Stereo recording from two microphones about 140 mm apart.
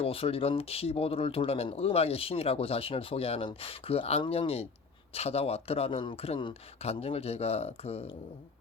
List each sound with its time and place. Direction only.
0.0 s speech: 45° left (ahead or behind)